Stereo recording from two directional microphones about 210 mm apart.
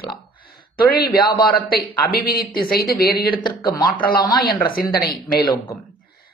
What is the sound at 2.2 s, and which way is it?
Speech, 45° left (ahead or behind).